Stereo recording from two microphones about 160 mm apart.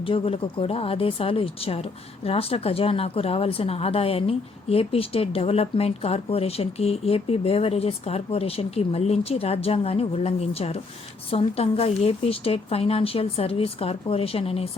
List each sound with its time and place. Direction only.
0.1 s speech: 35° left (ahead or behind)